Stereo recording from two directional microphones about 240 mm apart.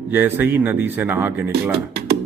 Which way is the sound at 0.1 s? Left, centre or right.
Centre.